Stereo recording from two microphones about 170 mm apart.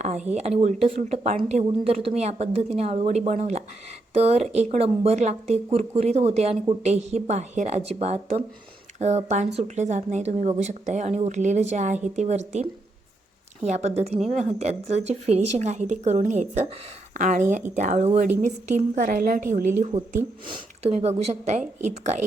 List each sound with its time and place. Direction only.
0.0 s speech: 40° right (ahead or behind)
13.6 s speech: 40° right (ahead or behind)
21.0 s speech: 40° right (ahead or behind)